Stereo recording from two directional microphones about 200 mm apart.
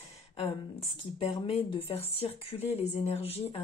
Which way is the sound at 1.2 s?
30° left (ahead or behind).